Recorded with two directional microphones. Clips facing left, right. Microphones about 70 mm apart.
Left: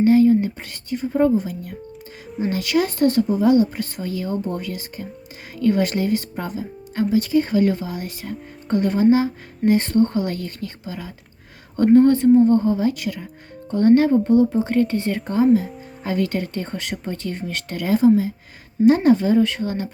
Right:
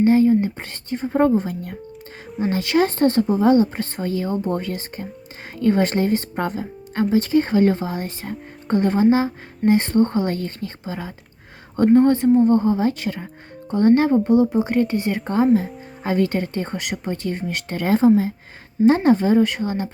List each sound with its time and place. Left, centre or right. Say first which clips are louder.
0.0 s speech: left 1 dB; right
2.5 s speech: right 2 dB; right
6.3 s speech: right 3 dB; right
17.7 s speech: even; right